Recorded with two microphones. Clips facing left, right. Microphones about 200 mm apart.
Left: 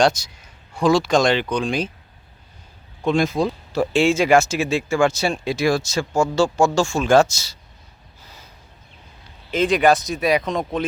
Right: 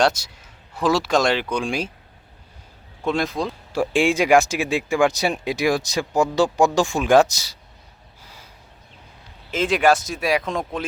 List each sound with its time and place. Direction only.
0.7 s speech: 5° right (ahead or behind)
3.1 s speech: centre (ahead or behind)
3.7 s speech: 10° right (ahead or behind)
9.5 s speech: 5° right (ahead or behind)